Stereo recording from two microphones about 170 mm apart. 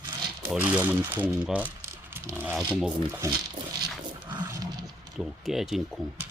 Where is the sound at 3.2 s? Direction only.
20° right (ahead or behind).